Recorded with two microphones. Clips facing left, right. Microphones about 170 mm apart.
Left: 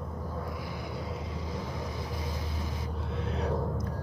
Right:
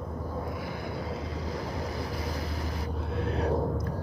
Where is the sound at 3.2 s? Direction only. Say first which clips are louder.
Right 4 dB; 60° right (ahead or behind).